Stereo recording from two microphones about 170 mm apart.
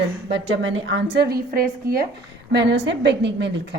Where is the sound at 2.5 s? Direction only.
90° right.